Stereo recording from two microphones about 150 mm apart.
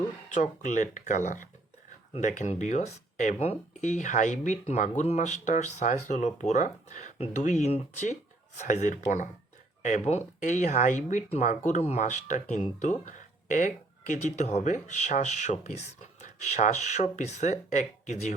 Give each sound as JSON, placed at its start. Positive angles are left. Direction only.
{"t": 0.3, "sound": "speech", "side_deg": 55}